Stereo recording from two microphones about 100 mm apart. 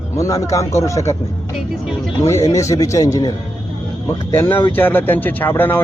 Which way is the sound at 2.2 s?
30° left (ahead or behind).